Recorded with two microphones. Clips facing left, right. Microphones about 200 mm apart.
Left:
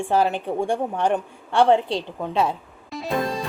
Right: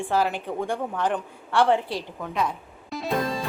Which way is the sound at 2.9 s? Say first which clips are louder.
Even; centre (ahead or behind).